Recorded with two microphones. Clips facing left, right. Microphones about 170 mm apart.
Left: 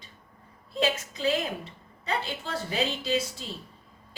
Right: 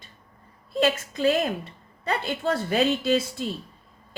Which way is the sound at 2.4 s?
55° right (ahead or behind).